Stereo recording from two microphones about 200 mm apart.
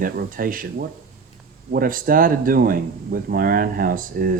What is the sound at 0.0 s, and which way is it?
Speech, 45° right (ahead or behind).